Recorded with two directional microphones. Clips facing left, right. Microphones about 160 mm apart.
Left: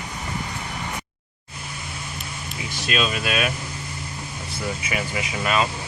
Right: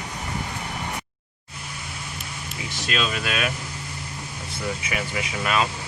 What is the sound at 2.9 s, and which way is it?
Speech, 10° left (ahead or behind).